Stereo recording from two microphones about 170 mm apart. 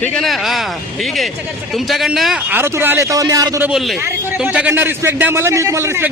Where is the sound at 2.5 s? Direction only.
10° right (ahead or behind).